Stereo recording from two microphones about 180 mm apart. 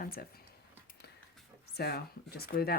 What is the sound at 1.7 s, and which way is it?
Speech, 60° left (ahead or behind).